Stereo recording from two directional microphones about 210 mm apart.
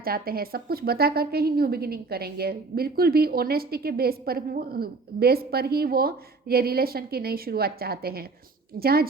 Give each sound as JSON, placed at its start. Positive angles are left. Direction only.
{"t": 0.0, "sound": "a woman's voice", "side_deg": -45}